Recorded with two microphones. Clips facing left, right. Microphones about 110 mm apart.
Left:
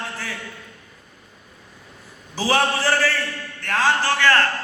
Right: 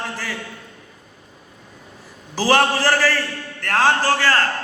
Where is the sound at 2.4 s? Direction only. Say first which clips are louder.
Right 3 dB; 90° right.